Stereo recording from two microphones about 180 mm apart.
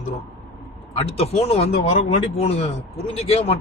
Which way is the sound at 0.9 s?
35° left (ahead or behind).